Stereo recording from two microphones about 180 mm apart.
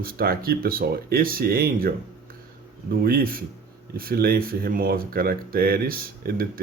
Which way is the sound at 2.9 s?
55° right (ahead or behind).